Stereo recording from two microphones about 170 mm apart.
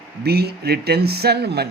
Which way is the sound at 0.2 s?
70° right (ahead or behind).